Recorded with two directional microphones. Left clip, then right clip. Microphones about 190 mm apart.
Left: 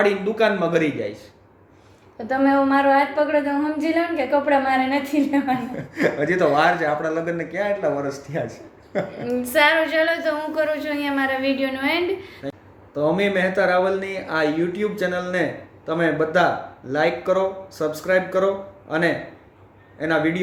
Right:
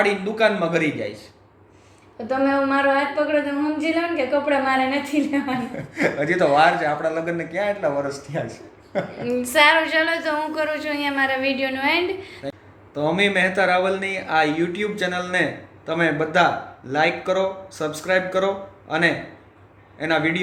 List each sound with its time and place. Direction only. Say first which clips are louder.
0.0 s speech: even; 15° left (ahead or behind)
2.1 s a woman's voice: left 2 dB; centre (ahead or behind)
5.7 s a man's voice: even; 20° left (ahead or behind)
9.2 s a woman's voice: right 2 dB; 5° right (ahead or behind)
12.4 s speech: even; 15° left (ahead or behind)